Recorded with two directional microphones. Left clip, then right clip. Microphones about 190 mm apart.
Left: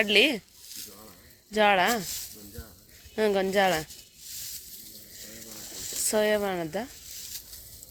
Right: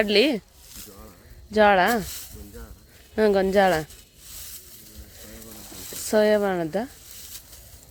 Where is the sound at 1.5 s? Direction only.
20° right (ahead or behind).